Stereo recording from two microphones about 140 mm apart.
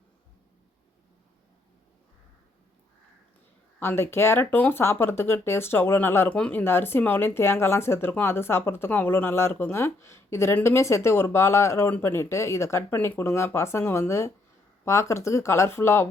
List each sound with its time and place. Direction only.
3.8 s speech: 15° left (ahead or behind)